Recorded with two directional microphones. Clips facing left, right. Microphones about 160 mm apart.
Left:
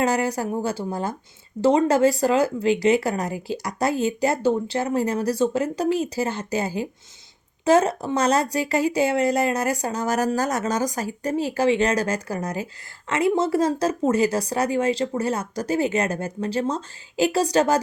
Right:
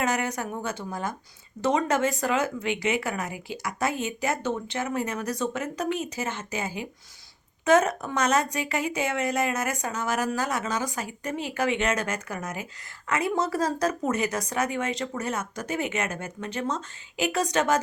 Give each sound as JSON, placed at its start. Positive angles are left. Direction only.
{"t": 0.0, "sound": "speech", "side_deg": 30}